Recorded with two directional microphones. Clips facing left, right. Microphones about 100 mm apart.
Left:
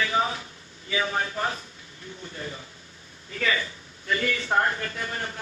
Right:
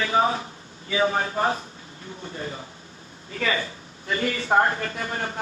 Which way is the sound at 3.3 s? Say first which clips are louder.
Right 1 dB; 30° right (ahead or behind).